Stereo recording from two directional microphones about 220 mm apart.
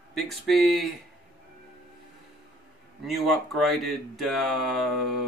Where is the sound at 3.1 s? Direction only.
Centre (ahead or behind).